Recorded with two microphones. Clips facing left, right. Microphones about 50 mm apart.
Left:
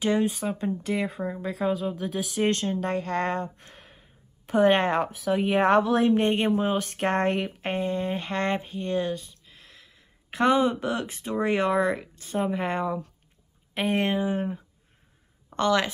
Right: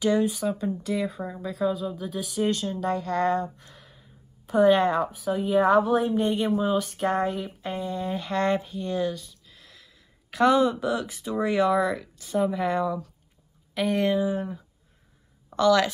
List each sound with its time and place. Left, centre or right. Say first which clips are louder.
0.0 s speech: right 1 dB; left